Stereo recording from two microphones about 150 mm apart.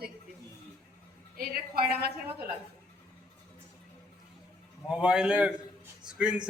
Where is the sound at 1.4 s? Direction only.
90° right.